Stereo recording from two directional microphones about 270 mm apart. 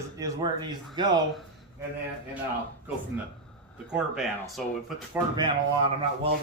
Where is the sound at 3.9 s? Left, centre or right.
Centre.